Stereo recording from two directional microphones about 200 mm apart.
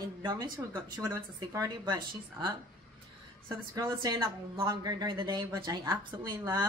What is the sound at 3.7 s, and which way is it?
Speech, 20° right (ahead or behind).